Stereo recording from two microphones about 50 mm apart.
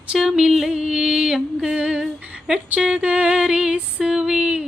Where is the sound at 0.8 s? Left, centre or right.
Centre.